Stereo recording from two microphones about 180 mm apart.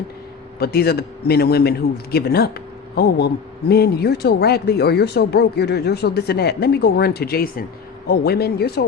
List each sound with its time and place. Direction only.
0.6 s speech: 60° left (ahead or behind)